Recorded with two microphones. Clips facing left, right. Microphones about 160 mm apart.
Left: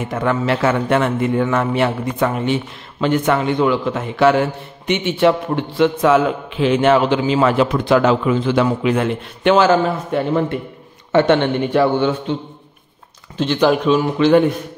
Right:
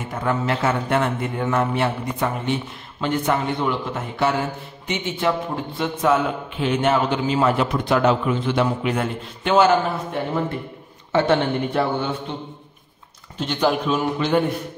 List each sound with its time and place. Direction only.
0.1 s a man's voice: 90° left
11.1 s speech: 70° left (ahead or behind); by 12.1 s 90° left
13.4 s a man's voice: 90° left